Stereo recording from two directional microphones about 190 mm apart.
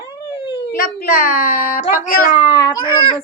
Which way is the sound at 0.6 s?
50° left (ahead or behind).